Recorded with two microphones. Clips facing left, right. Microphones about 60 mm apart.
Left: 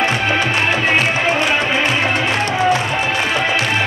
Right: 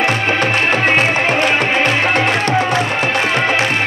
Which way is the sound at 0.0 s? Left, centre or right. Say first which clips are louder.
Right 1 dB; right.